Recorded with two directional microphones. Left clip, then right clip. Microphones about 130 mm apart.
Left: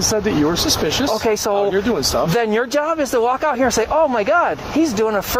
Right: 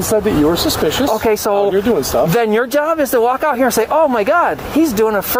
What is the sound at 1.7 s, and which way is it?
Speech, 5° right (ahead or behind).